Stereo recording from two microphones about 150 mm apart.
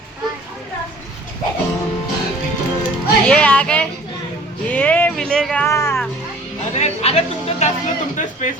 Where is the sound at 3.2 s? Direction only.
10° left (ahead or behind).